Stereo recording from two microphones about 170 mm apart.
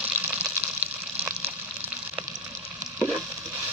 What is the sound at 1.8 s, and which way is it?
Frying, 10° right (ahead or behind).